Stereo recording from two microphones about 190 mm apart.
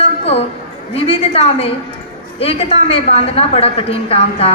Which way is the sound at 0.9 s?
30° left (ahead or behind).